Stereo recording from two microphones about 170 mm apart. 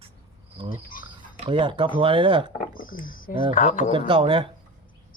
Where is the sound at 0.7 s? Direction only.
55° left (ahead or behind).